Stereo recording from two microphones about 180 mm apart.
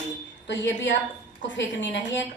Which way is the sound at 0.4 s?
85° left.